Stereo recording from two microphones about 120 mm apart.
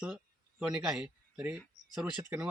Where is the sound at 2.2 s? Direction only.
20° right (ahead or behind).